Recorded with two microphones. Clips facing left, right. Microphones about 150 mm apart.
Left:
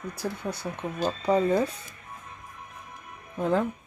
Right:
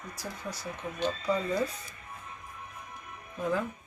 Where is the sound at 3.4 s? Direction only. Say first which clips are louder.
Left 5 dB; 65° left (ahead or behind).